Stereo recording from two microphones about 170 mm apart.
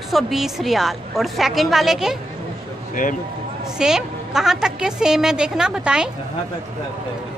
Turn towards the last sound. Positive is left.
turn(degrees=-5)  # may be behind; listen again after turning